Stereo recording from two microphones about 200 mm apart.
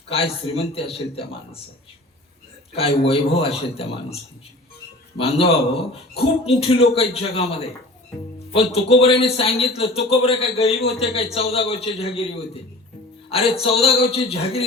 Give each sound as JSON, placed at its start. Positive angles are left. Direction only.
{"t": 0.1, "sound": "a man's voice", "side_deg": 30}
{"t": 2.7, "sound": "a man's voice", "side_deg": 30}
{"t": 13.3, "sound": "a man's voice", "side_deg": 30}